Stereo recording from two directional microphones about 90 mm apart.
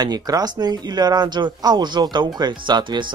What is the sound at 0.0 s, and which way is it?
Speech, 45° right (ahead or behind).